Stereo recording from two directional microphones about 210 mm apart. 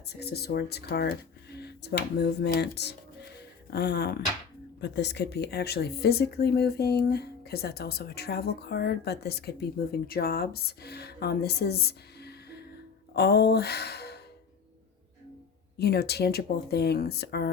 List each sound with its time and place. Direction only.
0.2 s speech: 50° left (ahead or behind)
3.3 s music: 50° left (ahead or behind)
4.8 s speech: 55° left (ahead or behind)
15.8 s speech: 50° left (ahead or behind)